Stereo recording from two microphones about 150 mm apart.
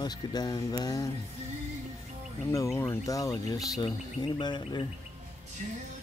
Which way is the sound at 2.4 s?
20° left (ahead or behind).